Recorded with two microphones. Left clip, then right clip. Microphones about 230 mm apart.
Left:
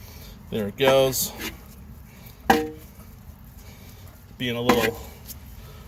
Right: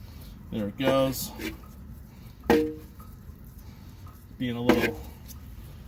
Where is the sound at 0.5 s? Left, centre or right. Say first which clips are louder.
Left 6 dB; left.